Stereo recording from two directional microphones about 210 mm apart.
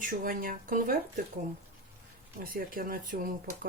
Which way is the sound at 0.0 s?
40° right (ahead or behind).